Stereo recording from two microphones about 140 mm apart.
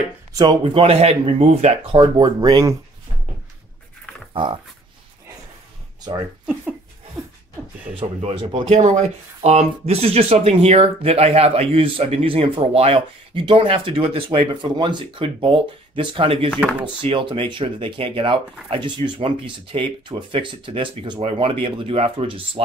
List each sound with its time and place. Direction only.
0.3 s speech: 25° right (ahead or behind)
0.7 s speech: 45° right (ahead or behind)
4.3 s speech: 35° right (ahead or behind)
7.9 s speech: 45° right (ahead or behind)
8.7 s speech: 50° right (ahead or behind)